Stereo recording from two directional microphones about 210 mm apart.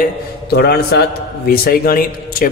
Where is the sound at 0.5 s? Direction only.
50° left (ahead or behind).